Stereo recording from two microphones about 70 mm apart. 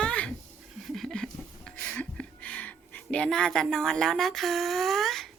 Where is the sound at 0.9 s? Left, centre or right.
Centre; by 3.3 s left.